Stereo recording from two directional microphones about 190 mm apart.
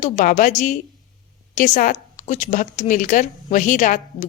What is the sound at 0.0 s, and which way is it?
A woman's voice, 45° left (ahead or behind).